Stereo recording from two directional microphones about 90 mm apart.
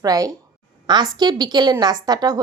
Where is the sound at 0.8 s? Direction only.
50° right (ahead or behind).